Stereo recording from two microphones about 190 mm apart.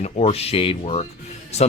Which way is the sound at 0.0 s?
35° left (ahead or behind).